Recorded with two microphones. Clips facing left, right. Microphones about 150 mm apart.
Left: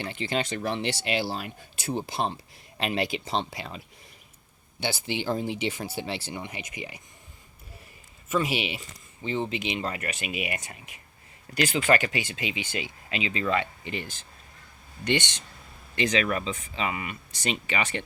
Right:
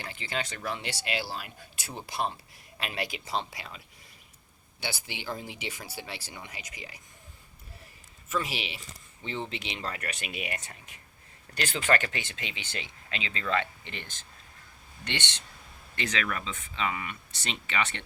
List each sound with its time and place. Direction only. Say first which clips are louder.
0.0 s speech: left 6 dB; 25° left (ahead or behind)
4.8 s speech: left 8 dB; 25° left (ahead or behind)
8.3 s speech: left 6 dB; 15° left (ahead or behind)
16.0 s speech: left 7 dB; 20° left (ahead or behind)